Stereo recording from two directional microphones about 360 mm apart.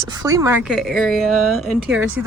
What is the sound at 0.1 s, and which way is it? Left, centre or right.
Speech, centre.